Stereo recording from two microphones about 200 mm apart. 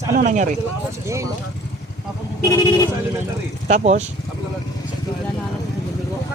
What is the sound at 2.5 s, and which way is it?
Speech, 20° left (ahead or behind).